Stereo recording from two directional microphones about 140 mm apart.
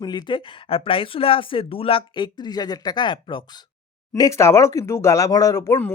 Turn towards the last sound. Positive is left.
turn(degrees=25)  # may be behind; listen again after turning